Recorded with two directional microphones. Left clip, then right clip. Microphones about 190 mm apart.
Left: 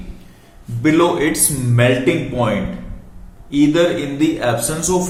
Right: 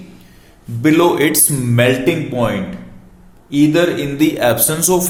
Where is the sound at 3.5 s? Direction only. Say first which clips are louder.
Right 1 dB; 50° right (ahead or behind).